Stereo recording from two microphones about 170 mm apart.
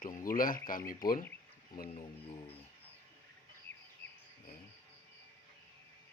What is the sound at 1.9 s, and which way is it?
Speech, 35° left (ahead or behind).